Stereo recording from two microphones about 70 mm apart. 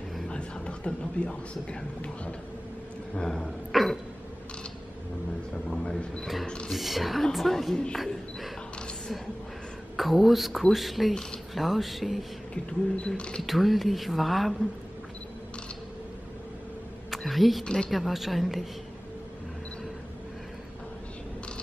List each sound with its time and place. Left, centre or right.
0.3 s a man's voice: centre
3.2 s speech: centre
5.7 s a man's voice: centre
6.7 s speech: centre
9.9 s speech: centre
13.0 s a man's voice: centre
13.4 s speech: centre
17.1 s speech: centre
17.6 s a man's voice: centre
17.9 s speech: centre